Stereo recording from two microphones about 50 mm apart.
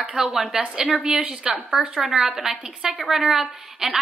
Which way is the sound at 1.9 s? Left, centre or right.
Centre.